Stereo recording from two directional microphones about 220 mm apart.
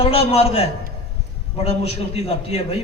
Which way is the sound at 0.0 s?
25° left (ahead or behind).